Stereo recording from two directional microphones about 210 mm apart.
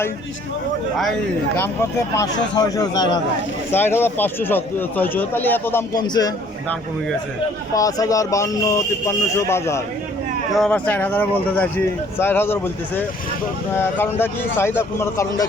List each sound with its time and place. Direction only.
1.5 s speech: 10° left (ahead or behind)
7.7 s speech: 15° left (ahead or behind)